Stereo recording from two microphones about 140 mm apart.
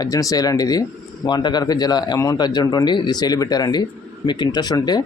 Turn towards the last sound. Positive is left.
turn(degrees=30)  # may be behind; listen again after turning